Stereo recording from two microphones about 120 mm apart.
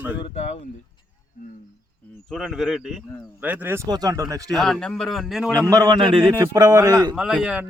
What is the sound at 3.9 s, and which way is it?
Speech, 30° right (ahead or behind).